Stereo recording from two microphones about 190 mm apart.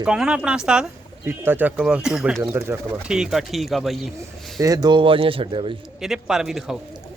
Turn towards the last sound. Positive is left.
turn(degrees=-5)  # may be behind; listen again after turning